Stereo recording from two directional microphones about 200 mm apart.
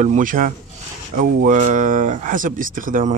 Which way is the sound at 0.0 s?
40° right (ahead or behind).